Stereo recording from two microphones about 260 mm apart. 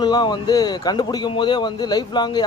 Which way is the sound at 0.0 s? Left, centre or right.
Centre.